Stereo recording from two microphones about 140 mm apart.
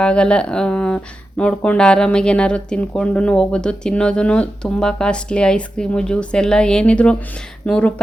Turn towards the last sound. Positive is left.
turn(degrees=5)  # may be behind; listen again after turning